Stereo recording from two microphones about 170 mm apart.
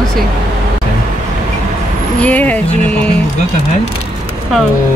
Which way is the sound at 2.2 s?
10° left (ahead or behind).